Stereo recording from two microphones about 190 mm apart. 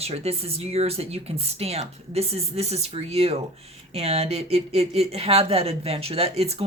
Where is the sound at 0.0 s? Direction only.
35° right (ahead or behind).